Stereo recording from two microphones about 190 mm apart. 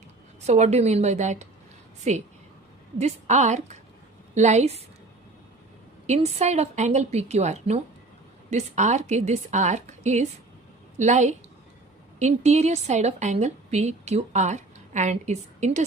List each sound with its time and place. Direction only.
0.4 s a woman's voice: 35° right (ahead or behind)
3.0 s a woman's voice: 35° right (ahead or behind)
6.1 s a woman's voice: 35° right (ahead or behind)